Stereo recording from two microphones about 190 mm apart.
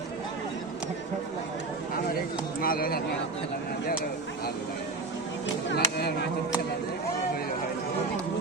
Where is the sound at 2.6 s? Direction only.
50° left (ahead or behind).